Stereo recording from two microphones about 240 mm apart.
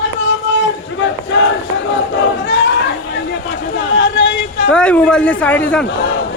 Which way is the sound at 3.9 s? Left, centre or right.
Left.